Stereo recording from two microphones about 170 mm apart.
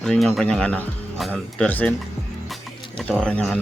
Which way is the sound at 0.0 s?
5° left (ahead or behind).